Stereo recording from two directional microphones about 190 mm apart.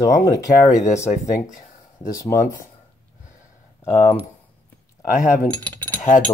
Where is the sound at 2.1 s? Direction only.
15° left (ahead or behind).